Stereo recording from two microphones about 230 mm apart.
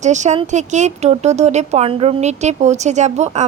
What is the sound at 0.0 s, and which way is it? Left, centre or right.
Speech, right.